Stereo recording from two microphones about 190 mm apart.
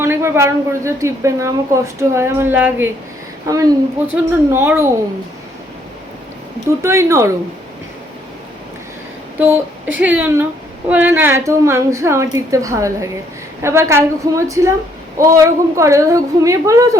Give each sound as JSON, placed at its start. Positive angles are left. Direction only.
{"t": 0.0, "sound": "a woman's voice", "side_deg": -15}
{"t": 6.7, "sound": "a woman's voice", "side_deg": -15}
{"t": 10.0, "sound": "a woman's voice", "side_deg": -10}